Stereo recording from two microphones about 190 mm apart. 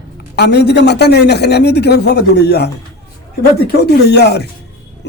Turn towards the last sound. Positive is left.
turn(degrees=60)  # may be behind; listen again after turning